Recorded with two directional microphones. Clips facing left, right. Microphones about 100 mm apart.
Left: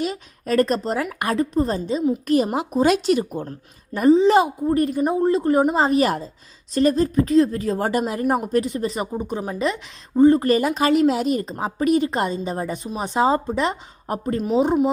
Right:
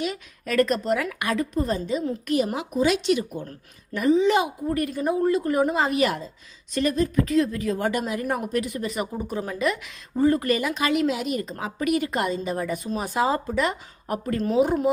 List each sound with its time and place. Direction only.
0.0 s a woman's voice: 35° left (ahead or behind)